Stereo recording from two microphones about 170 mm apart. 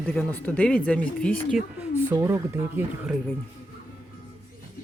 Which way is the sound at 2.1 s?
15° right (ahead or behind).